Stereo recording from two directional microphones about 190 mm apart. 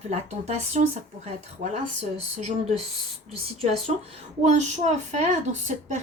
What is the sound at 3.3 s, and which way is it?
A woman's voice, 30° right (ahead or behind).